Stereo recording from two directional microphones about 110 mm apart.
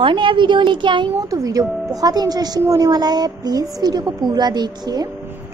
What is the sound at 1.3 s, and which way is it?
A woman's voice, 30° right (ahead or behind).